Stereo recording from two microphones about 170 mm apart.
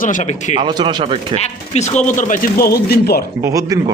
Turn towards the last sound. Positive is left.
turn(degrees=-20)  # may be behind; listen again after turning